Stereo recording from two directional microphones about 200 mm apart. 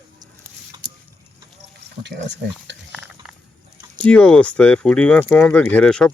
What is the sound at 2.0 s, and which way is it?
Speech, 60° right (ahead or behind).